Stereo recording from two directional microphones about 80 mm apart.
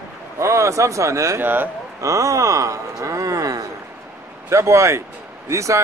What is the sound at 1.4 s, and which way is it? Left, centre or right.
Speech, right.